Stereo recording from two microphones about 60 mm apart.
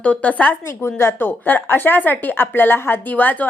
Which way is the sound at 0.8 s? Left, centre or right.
Left.